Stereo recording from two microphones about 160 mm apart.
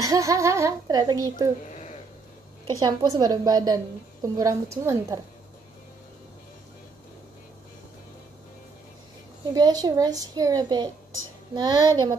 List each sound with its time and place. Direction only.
0.0 s a woman's voice: 20° right (ahead or behind)
1.6 s a sound: 50° left (ahead or behind)
2.6 s a woman's voice: 25° right (ahead or behind)
9.5 s a woman's voice: 25° right (ahead or behind)